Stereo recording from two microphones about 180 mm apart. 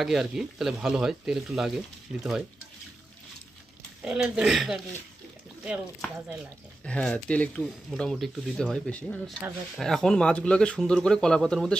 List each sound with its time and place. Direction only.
0.0 s speech: centre (ahead or behind)
4.0 s speech: 5° right (ahead or behind)